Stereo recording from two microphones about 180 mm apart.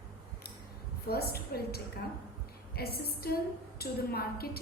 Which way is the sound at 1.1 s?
60° left (ahead or behind).